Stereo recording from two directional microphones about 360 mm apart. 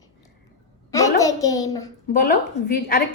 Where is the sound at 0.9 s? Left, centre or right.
Centre.